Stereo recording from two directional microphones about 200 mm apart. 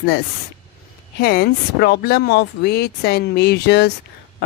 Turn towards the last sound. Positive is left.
turn(degrees=55)  # may be behind; listen again after turning